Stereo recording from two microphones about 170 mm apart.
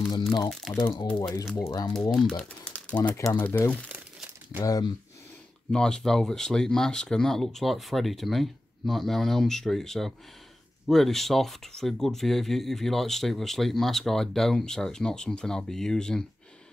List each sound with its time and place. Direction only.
0.5 s speech: centre (ahead or behind)
1.1 s speech: 20° left (ahead or behind)
2.0 s speech: centre (ahead or behind)
4.6 s speech: 25° left (ahead or behind)
5.7 s speech: 5° left (ahead or behind)